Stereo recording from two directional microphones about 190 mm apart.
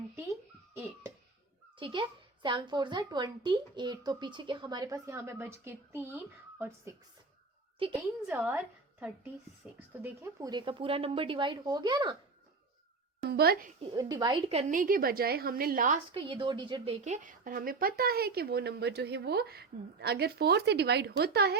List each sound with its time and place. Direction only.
1.8 s speech: 25° right (ahead or behind)
8.3 s a woman's voice: 10° right (ahead or behind)
13.2 s a woman's voice: 55° right (ahead or behind)
13.9 s speech: 20° right (ahead or behind)
14.7 s a woman's voice: 45° right (ahead or behind)
16.1 s a woman's voice: 25° right (ahead or behind); by 21.5 s 60° right (ahead or behind)